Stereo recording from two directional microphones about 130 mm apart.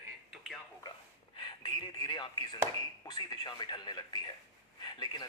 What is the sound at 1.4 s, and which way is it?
Speech, 35° left (ahead or behind).